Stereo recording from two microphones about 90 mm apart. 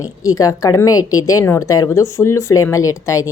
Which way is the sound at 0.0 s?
40° left (ahead or behind).